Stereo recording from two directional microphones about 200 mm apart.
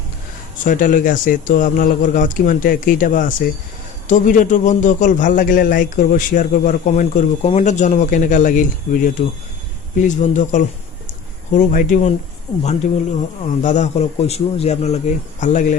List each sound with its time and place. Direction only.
0.6 s a man's voice: 40° left (ahead or behind)
13.4 s a man's voice: 35° left (ahead or behind)